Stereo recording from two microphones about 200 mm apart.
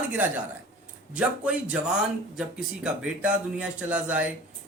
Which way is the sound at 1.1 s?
5° right (ahead or behind).